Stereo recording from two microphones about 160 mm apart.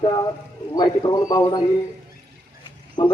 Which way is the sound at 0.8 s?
20° left (ahead or behind).